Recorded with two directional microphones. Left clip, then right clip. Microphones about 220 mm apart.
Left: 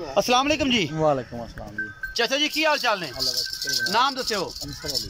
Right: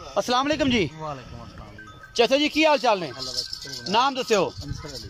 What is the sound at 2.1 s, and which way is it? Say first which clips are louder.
Speech: right 3 dB; 15° right (ahead or behind).